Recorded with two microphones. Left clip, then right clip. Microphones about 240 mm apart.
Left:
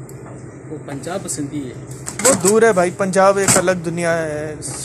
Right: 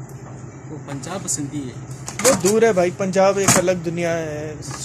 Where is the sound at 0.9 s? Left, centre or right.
Right.